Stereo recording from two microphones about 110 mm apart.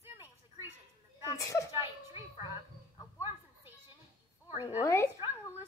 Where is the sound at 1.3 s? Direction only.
30° left (ahead or behind).